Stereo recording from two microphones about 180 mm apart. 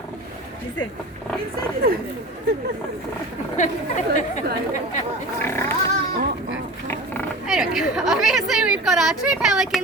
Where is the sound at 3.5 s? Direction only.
40° left (ahead or behind).